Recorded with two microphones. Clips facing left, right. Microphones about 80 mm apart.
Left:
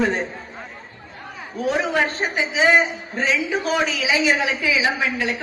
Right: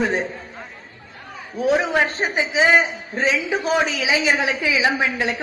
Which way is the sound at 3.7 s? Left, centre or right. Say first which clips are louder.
Right 2 dB; right.